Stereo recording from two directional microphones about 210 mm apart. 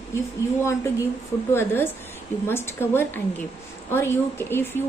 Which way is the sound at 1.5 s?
10° left (ahead or behind).